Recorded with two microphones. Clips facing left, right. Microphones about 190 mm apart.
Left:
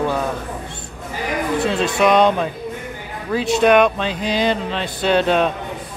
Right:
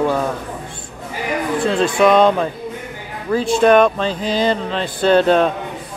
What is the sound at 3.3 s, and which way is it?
Speech, 20° left (ahead or behind).